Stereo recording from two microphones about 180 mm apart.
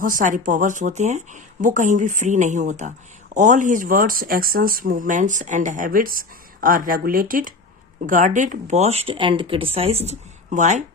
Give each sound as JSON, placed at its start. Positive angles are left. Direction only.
{"t": 0.0, "sound": "speech", "side_deg": -50}